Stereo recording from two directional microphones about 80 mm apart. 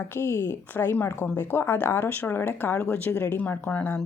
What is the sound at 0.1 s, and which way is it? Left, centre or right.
A woman's voice, left.